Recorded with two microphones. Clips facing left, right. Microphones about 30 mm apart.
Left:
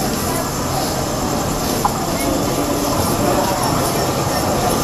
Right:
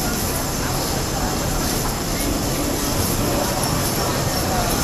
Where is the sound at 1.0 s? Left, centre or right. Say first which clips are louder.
Left 4 dB; centre.